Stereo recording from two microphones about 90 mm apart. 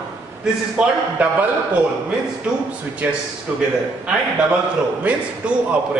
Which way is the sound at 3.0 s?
20° right (ahead or behind).